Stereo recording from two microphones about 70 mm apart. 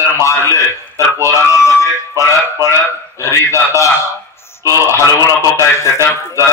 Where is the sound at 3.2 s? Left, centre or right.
Left.